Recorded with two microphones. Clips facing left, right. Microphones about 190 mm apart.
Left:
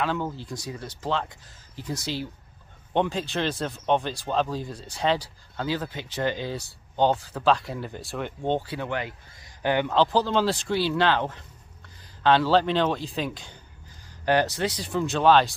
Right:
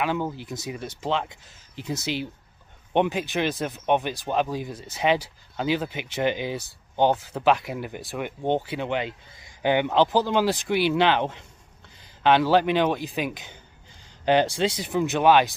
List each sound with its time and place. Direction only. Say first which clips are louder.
0.0 s speech: right 1 dB; 15° right (ahead or behind)